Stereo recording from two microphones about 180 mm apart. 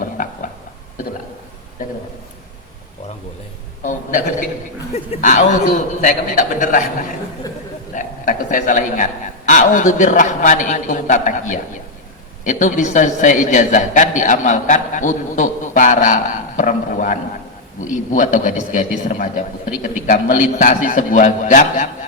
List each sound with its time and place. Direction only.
3.8 s a man's voice: 45° left (ahead or behind)
7.9 s a sound: 45° left (ahead or behind)
9.5 s a man's voice: 45° left (ahead or behind)